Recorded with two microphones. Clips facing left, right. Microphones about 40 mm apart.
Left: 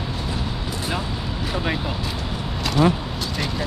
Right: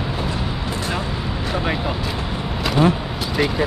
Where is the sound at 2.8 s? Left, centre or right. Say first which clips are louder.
Right 1 dB; right.